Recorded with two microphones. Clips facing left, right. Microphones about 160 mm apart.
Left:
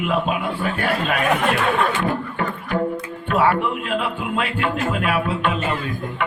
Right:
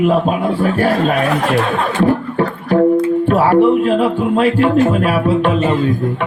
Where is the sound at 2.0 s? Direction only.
35° right (ahead or behind).